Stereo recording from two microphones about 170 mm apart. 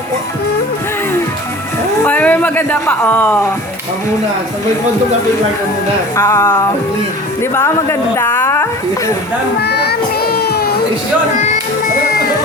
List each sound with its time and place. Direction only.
2.0 s speech: 10° left (ahead or behind)
6.1 s speech: 15° left (ahead or behind)
9.6 s child singing: 70° left (ahead or behind)